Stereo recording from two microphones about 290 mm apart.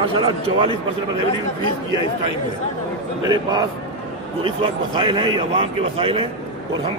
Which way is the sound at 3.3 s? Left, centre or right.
Centre.